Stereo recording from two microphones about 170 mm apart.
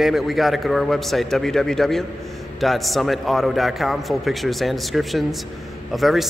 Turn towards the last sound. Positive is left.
turn(degrees=0)  # may be behind; listen again after turning